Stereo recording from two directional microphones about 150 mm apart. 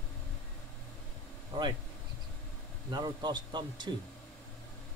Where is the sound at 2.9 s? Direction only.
30° right (ahead or behind).